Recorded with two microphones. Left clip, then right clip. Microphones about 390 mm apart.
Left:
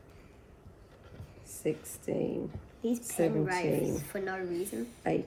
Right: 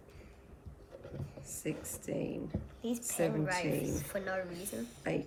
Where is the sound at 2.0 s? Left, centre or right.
Left.